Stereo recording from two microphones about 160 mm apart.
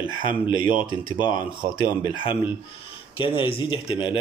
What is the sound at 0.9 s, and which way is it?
Speech, 30° right (ahead or behind).